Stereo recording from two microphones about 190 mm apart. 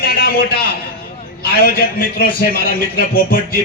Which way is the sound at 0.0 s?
50° left (ahead or behind).